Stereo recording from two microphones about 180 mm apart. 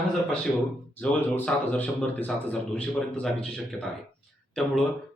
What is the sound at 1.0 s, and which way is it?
A man's voice, 10° left (ahead or behind).